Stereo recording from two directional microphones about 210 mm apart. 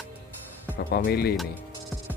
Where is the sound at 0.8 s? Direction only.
50° left (ahead or behind).